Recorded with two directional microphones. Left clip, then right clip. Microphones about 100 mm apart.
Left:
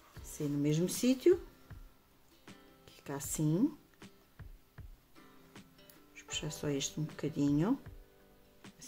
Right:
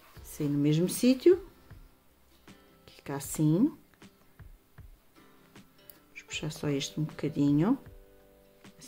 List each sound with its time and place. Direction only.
0.3 s speech: 25° right (ahead or behind)
2.4 s music: centre (ahead or behind)
2.8 s speech: 15° right (ahead or behind)
4.0 s music: centre (ahead or behind)
6.1 s speech: 20° right (ahead or behind)
8.6 s music: centre (ahead or behind)